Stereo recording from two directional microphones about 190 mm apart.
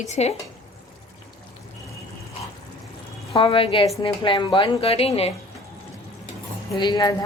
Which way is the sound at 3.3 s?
25° left (ahead or behind).